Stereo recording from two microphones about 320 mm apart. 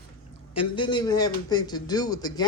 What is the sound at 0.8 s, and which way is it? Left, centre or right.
Speech, centre.